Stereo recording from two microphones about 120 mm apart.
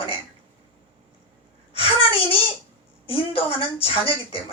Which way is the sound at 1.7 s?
50° left (ahead or behind).